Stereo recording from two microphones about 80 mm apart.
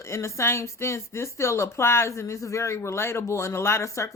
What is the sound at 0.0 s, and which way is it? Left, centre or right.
Speech, left.